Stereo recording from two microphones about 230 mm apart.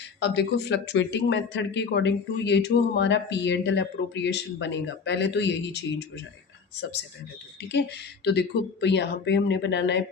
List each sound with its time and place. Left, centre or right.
0.2 s a man's voice: left
7.6 s a man's voice: left